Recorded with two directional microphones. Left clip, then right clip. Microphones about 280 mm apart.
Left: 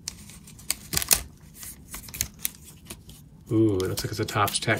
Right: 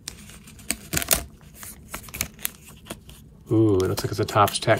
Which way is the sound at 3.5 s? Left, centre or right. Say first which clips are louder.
Right 3 dB; centre.